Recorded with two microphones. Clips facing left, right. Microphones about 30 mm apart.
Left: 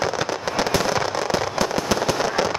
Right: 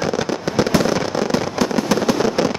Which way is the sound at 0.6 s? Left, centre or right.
Centre.